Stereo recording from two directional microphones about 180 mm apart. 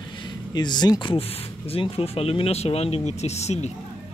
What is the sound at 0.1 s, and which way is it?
Speech, 25° left (ahead or behind).